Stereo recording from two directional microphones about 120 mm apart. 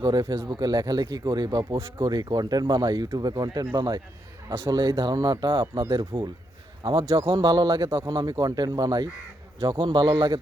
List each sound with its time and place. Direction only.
0.0 s speech: 35° right (ahead or behind)
4.4 s speech: 25° right (ahead or behind)
4.7 s speech: 35° right (ahead or behind)
7.0 s a man's voice: 25° right (ahead or behind)